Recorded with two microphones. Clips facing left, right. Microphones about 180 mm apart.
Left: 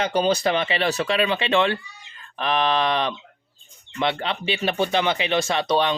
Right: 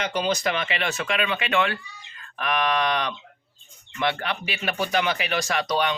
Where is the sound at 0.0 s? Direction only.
30° left (ahead or behind).